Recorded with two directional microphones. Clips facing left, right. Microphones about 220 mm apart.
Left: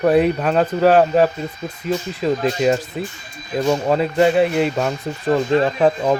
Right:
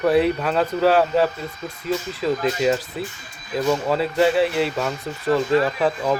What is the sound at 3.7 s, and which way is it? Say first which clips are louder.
Speech: left 3 dB; 20° left (ahead or behind).